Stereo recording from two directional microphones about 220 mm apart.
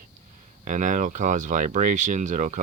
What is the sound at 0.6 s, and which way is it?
Speech, 35° right (ahead or behind).